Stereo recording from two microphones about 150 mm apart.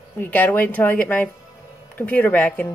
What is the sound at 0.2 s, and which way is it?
Speech, 10° left (ahead or behind).